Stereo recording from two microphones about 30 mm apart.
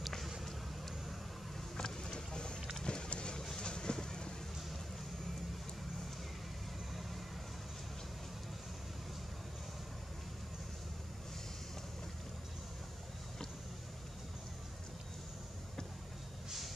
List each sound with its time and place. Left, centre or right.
0.5 s vehicle: centre
1.8 s boat: left
2.8 s a sound: left
3.1 s vehicle: left